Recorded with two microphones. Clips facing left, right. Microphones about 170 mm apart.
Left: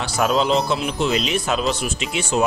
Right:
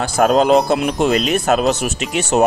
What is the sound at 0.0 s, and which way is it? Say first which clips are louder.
Speech: right 6 dB; 50° right (ahead or behind).